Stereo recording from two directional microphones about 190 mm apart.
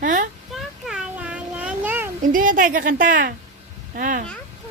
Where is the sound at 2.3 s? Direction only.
45° right (ahead or behind).